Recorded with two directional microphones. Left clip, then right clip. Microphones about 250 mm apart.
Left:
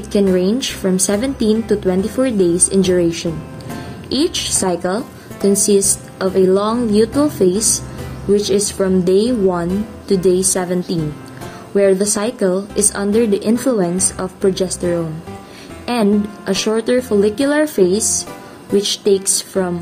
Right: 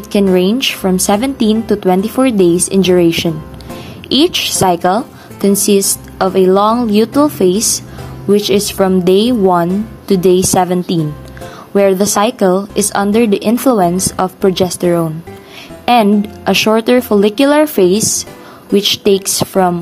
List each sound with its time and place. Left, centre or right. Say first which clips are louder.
0.1 s a woman's voice: right 4 dB; right
15.8 s a woman's voice: right 7 dB; right